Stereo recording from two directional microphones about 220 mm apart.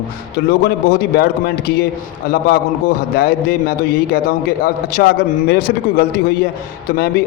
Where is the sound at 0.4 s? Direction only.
45° left (ahead or behind).